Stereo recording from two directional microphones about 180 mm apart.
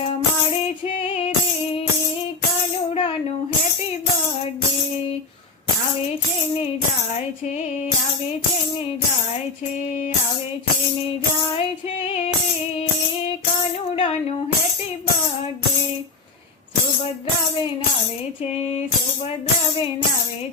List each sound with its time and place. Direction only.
2.9 s tambourine: 30° left (ahead or behind)
13.9 s music: 30° left (ahead or behind)